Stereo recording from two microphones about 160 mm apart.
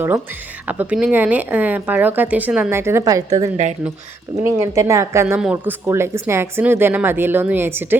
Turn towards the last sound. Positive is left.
turn(degrees=-15)  # may be behind; listen again after turning